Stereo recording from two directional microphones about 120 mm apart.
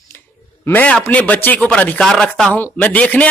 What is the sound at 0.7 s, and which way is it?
Speech, 10° left (ahead or behind).